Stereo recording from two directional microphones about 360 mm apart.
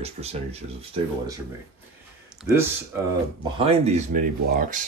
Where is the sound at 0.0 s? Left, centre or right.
Centre.